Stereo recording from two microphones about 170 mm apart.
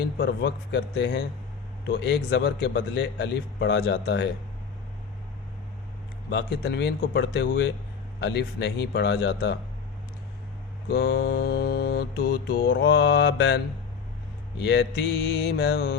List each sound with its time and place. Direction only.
0.2 s speech: 90° left
1.9 s mantra: 75° left (ahead or behind)
6.3 s mantra: 75° left (ahead or behind)
10.8 s mantra: 70° left (ahead or behind)
14.6 s mantra: 80° left